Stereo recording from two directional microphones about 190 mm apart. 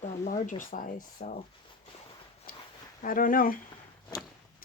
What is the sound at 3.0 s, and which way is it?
Speech, 45° left (ahead or behind).